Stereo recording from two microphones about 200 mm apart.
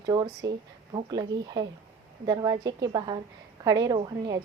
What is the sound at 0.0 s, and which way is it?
A woman's voice, 20° right (ahead or behind).